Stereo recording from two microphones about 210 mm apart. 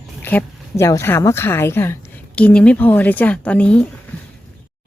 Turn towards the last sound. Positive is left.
turn(degrees=5)  # may be behind; listen again after turning